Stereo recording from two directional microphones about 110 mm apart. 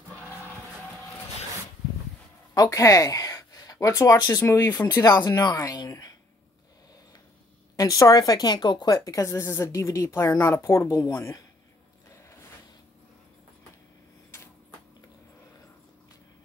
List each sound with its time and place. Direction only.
2.5 s speech: 35° left (ahead or behind)
7.7 s speech: 35° left (ahead or behind)